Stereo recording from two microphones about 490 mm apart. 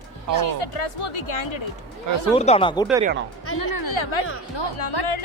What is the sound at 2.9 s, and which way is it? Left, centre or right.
Speech, centre.